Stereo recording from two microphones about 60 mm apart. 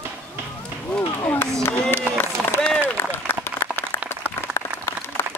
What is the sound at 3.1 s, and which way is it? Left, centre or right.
Applause, left.